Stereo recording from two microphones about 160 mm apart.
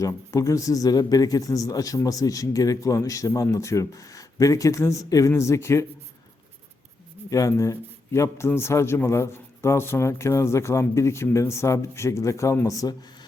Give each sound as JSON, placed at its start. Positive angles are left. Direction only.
{"t": 0.0, "sound": "speech", "side_deg": 20}
{"t": 7.3, "sound": "speech", "side_deg": 20}